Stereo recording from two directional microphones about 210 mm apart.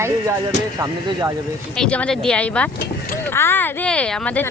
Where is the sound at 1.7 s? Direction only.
5° left (ahead or behind).